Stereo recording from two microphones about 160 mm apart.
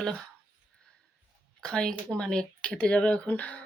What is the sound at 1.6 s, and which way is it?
Speech, 5° left (ahead or behind).